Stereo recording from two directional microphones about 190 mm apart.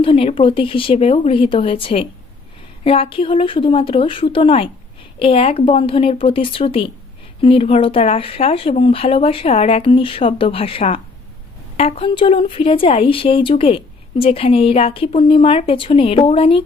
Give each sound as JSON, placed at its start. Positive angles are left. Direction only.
{"t": 0.0, "sound": "speech", "side_deg": 30}